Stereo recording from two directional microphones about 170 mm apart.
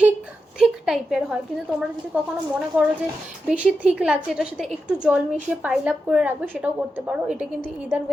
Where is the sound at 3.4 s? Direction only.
5° right (ahead or behind).